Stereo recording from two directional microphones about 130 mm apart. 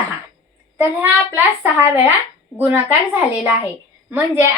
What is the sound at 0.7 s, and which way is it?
A woman's voice, 15° right (ahead or behind).